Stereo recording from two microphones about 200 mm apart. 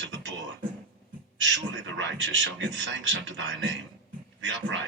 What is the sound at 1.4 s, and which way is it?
A man's voice, 65° right (ahead or behind).